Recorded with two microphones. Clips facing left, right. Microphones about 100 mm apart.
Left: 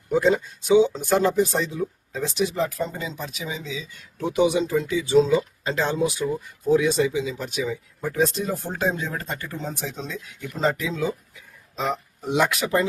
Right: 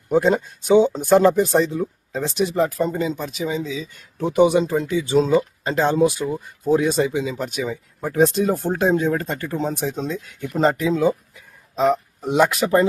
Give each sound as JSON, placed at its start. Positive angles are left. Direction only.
{"t": 0.1, "sound": "speech", "side_deg": -45}